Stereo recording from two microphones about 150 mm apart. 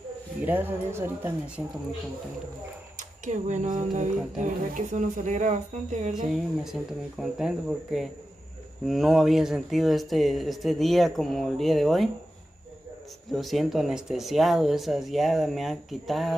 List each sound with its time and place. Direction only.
0.4 s speech: 10° right (ahead or behind)
3.0 s speech: 55° right (ahead or behind)
6.3 s speech: centre (ahead or behind)
13.3 s speech: centre (ahead or behind)